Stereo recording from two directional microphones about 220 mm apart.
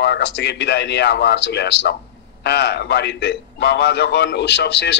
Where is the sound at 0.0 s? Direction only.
50° left (ahead or behind).